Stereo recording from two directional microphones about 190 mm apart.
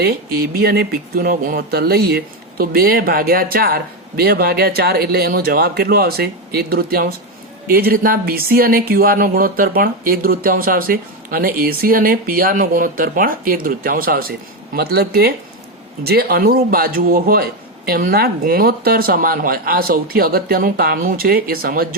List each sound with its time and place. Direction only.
0.0 s speech: 55° right (ahead or behind)